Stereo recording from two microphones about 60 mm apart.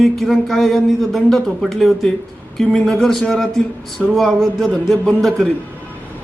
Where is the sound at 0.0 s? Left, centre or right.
Centre.